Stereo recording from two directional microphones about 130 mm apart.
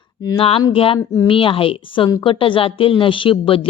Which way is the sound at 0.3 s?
45° left (ahead or behind).